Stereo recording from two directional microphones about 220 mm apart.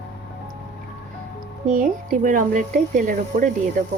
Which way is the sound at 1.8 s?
35° right (ahead or behind).